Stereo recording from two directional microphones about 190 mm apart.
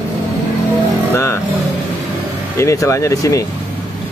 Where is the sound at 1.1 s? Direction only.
15° left (ahead or behind).